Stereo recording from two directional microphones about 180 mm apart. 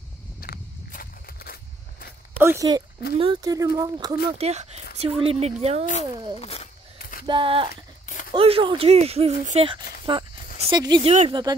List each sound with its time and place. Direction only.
0.4 s walk: 55° left (ahead or behind)
2.3 s speech: 15° right (ahead or behind)
4.4 s speech: 35° right (ahead or behind)
6.4 s speech: 35° left (ahead or behind)
7.0 s a sound: 50° left (ahead or behind)
7.2 s speech: 30° right (ahead or behind)